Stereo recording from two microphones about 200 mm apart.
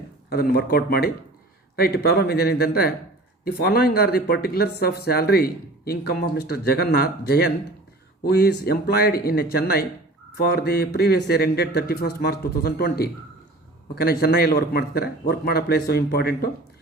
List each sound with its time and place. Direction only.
0.3 s speech: 50° left (ahead or behind)